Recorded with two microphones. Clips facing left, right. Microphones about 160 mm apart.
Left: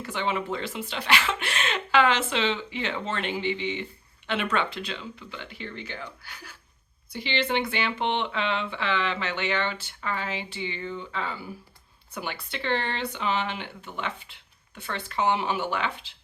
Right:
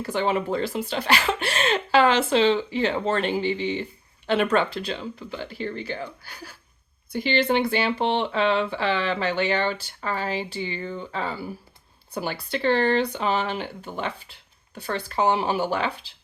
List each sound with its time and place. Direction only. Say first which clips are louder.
0.0 s speech: right 5 dB; 40° right (ahead or behind)